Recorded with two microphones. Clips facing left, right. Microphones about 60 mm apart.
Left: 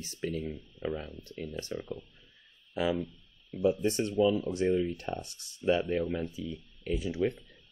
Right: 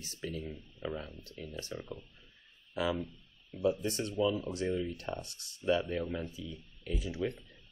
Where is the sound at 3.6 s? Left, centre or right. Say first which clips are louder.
Left 4 dB; left.